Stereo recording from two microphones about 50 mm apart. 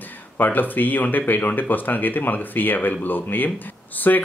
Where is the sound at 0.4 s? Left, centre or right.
Left.